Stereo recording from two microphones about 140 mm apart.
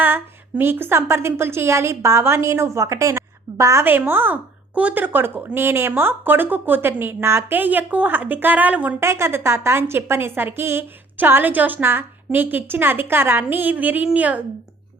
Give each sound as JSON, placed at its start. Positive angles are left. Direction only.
{"t": 0.0, "sound": "a woman's voice", "side_deg": -15}